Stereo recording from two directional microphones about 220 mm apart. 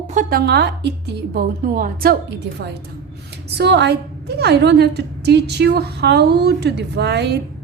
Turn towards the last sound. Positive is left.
turn(degrees=-50)  # may be behind; listen again after turning